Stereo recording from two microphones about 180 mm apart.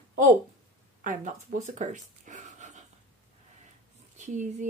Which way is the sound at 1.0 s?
45° right (ahead or behind).